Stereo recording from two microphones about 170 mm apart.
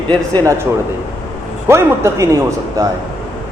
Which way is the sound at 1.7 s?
15° right (ahead or behind).